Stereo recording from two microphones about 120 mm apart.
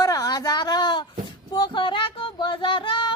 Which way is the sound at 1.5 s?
40° left (ahead or behind).